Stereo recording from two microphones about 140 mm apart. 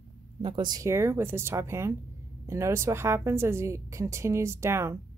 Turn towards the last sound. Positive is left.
turn(degrees=-20)  # may be behind; listen again after turning